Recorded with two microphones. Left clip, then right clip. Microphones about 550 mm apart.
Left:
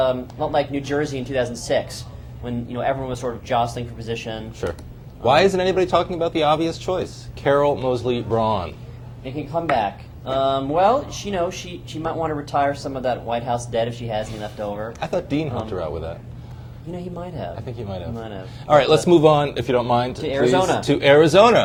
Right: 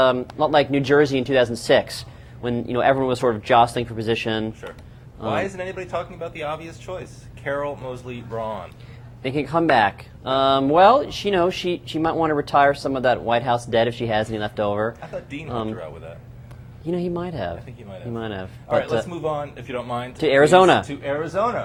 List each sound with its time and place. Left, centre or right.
0.0 s speech: right
5.3 s speech: left
9.2 s speech: right
16.9 s speech: right
18.9 s speech: left
20.2 s speech: right
20.8 s speech: left